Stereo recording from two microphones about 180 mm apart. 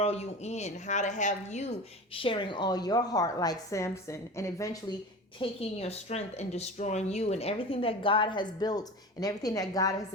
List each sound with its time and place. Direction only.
0.0 s a woman's voice: 35° left (ahead or behind)
2.1 s a woman's voice: 30° left (ahead or behind)
5.4 s a woman's voice: 35° left (ahead or behind)